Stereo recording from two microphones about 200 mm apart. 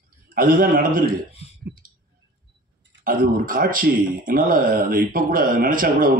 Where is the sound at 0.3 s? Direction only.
45° right (ahead or behind).